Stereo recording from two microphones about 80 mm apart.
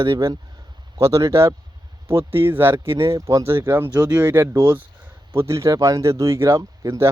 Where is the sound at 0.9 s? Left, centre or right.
Right.